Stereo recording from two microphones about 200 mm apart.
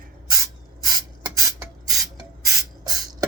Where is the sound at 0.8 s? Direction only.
15° right (ahead or behind).